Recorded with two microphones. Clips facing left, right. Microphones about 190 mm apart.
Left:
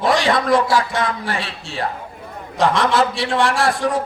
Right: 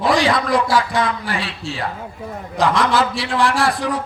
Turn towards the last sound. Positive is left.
turn(degrees=0)  # may be behind; listen again after turning